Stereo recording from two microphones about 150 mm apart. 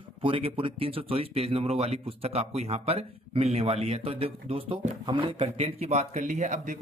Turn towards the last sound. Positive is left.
turn(degrees=-60)  # may be behind; listen again after turning